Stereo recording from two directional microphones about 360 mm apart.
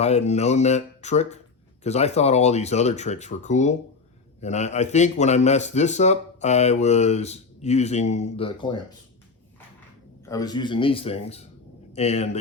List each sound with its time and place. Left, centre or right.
0.0 s speech: centre
10.2 s speech: centre